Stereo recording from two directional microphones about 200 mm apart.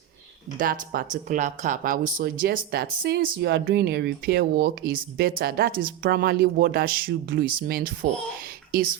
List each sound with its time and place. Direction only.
0.6 s speech: 45° right (ahead or behind)